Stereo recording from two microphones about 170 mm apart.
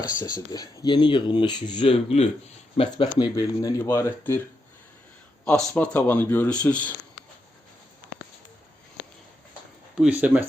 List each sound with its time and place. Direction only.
0.2 s speech: 20° left (ahead or behind)
5.5 s speech: 5° left (ahead or behind)
10.0 s speech: 10° right (ahead or behind)